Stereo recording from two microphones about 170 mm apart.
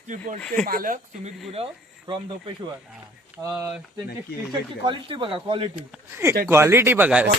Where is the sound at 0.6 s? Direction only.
55° right (ahead or behind).